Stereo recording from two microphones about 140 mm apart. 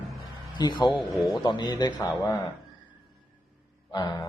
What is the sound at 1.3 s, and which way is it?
Speech, 30° left (ahead or behind).